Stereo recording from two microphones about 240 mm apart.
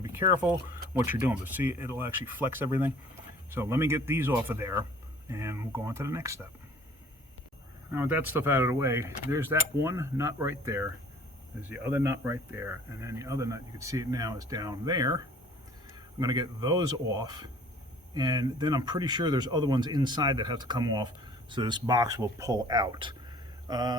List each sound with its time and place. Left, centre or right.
0.0 s speech: centre
7.9 s speech: centre